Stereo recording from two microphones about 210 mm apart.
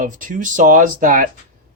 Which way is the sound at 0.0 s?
40° right (ahead or behind).